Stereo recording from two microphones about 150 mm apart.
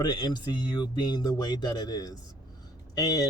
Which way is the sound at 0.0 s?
30° left (ahead or behind).